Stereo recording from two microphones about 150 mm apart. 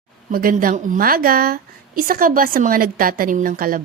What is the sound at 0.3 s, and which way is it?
A woman's voice, 70° right (ahead or behind).